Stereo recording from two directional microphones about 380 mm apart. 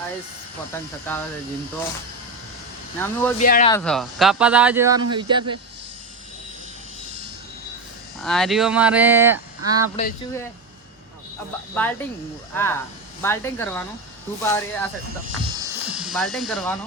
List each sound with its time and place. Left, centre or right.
1.1 s speech: centre
3.0 s speech: centre
3.3 s speech: centre
3.7 s speech: centre
8.2 s speech: centre
9.9 s speech: left
11.7 s speech: centre
15.6 s electric shaver: centre